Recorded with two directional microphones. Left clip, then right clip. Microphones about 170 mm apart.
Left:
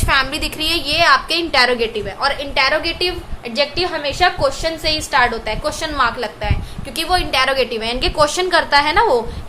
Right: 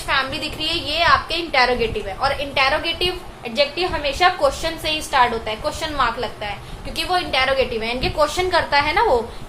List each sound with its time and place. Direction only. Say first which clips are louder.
0.1 s a woman's voice: left 4 dB; 35° left (ahead or behind)